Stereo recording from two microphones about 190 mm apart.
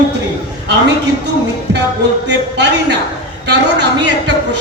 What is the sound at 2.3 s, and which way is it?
Speech, 65° right (ahead or behind).